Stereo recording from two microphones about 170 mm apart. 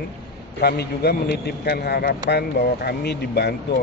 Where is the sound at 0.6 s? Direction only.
70° left (ahead or behind).